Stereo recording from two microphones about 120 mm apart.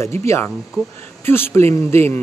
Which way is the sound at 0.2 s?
25° left (ahead or behind).